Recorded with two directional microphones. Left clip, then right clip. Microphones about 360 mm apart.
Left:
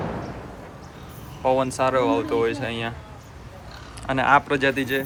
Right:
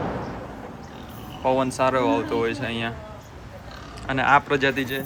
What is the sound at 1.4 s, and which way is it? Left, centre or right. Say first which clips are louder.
A man's voice: even; centre.